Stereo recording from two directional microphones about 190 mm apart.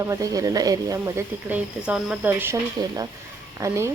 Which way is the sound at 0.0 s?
15° right (ahead or behind).